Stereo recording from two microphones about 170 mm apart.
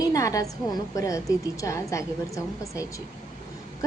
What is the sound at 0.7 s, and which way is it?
A woman's voice, 20° left (ahead or behind).